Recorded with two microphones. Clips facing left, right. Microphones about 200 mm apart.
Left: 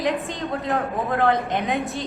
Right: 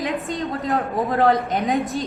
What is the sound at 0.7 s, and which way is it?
A man's voice, 35° right (ahead or behind).